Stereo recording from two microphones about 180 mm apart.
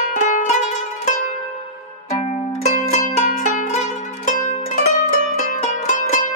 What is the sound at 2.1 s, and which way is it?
Zither, 40° left (ahead or behind).